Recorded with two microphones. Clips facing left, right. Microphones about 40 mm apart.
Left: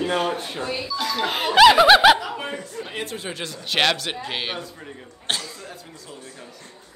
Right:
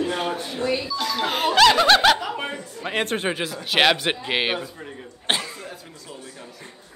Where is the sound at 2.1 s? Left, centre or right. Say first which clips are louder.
Right 1 dB; centre.